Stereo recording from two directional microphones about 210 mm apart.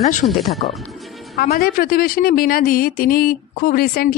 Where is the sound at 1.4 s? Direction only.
45° left (ahead or behind).